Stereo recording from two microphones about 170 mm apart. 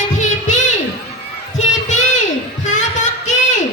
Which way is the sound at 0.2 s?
45° left (ahead or behind).